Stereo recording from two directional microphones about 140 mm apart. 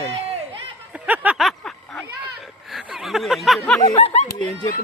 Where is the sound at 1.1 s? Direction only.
10° right (ahead or behind).